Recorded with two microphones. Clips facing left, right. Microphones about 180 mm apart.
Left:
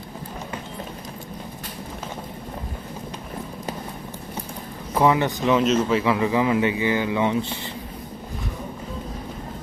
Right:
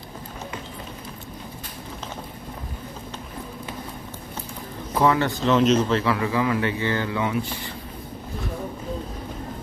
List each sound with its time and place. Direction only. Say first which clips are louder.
4.9 s speech: left 1 dB; 15° left (ahead or behind)
5.5 s speech: right 2 dB; 5° left (ahead or behind); by 7.7 s 25° left (ahead or behind)